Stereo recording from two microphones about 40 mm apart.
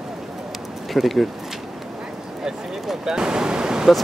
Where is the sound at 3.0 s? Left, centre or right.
Centre.